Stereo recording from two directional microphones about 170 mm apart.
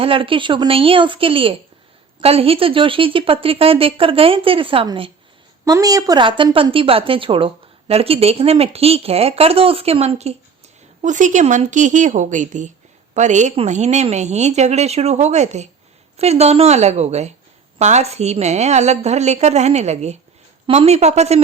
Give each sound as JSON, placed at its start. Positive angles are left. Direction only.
{"t": 0.0, "sound": "a woman's voice", "side_deg": -30}
{"t": 5.6, "sound": "a woman's voice", "side_deg": -20}